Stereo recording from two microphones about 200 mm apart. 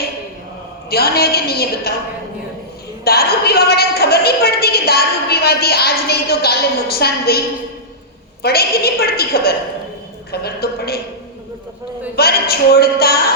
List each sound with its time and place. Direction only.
0.9 s a woman's voice: 50° left (ahead or behind)
3.0 s a woman's voice: 50° left (ahead or behind)
12.1 s a woman's voice: 50° left (ahead or behind)